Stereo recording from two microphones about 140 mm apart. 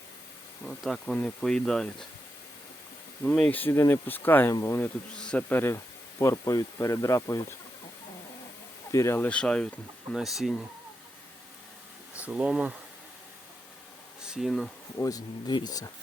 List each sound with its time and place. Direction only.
0.6 s speech: 5° left (ahead or behind)
3.2 s speech: 10° left (ahead or behind)
5.1 s speech: 5° left (ahead or behind); by 7.4 s 20° left (ahead or behind)
8.9 s speech: 20° left (ahead or behind); by 10.6 s centre (ahead or behind)
12.1 s speech: 10° right (ahead or behind)
14.3 s speech: 5° right (ahead or behind)
14.9 s speech: 25° left (ahead or behind)